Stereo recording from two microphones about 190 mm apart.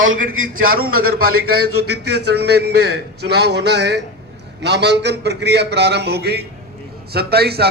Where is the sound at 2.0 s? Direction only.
60° right (ahead or behind).